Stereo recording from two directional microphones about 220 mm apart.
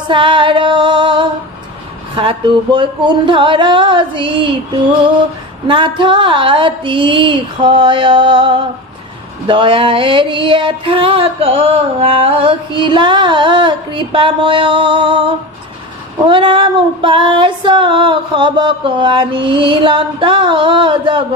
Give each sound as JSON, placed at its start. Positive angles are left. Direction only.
{"t": 0.1, "sound": "female singing", "side_deg": -20}
{"t": 2.1, "sound": "music", "side_deg": -20}
{"t": 5.7, "sound": "music", "side_deg": -20}